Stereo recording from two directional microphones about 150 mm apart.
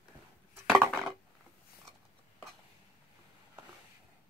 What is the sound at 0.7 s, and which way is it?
Dishes, centre (ahead or behind).